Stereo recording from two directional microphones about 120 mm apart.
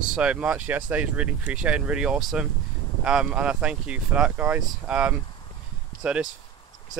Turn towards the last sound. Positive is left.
turn(degrees=-10)  # may be behind; listen again after turning